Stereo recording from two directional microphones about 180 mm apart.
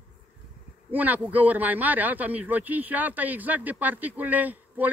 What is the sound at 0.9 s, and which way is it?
Speech, 10° right (ahead or behind).